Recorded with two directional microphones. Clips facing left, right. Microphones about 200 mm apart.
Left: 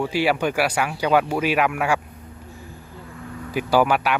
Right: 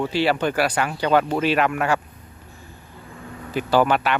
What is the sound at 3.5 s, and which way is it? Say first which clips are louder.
Speech: even; 10° left (ahead or behind).